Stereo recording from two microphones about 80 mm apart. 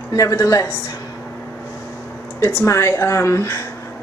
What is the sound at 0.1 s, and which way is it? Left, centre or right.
Speech, left.